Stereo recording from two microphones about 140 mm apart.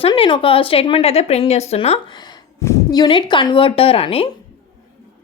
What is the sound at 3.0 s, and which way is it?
Speech, 35° left (ahead or behind).